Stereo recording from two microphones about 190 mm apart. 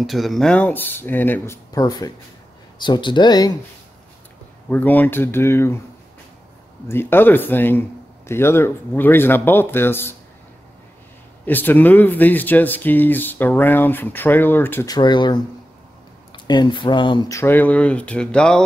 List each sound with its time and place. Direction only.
0.0 s speech: centre (ahead or behind); by 3.5 s 20° left (ahead or behind)
4.6 s speech: 10° left (ahead or behind)
6.9 s speech: 10° left (ahead or behind)
11.4 s speech: 10° left (ahead or behind)